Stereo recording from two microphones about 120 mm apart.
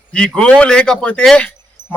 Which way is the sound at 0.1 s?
5° left (ahead or behind).